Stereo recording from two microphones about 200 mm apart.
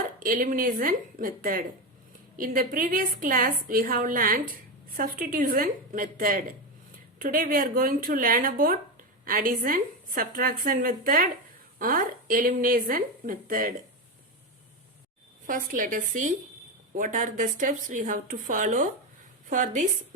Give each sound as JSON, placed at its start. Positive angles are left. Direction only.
{"t": 0.2, "sound": "a woman's voice", "side_deg": -45}
{"t": 15.4, "sound": "speech", "side_deg": -45}